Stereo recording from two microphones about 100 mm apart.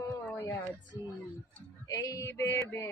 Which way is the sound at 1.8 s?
35° left (ahead or behind).